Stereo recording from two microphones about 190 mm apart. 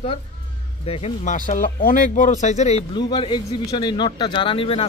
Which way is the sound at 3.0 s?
25° left (ahead or behind).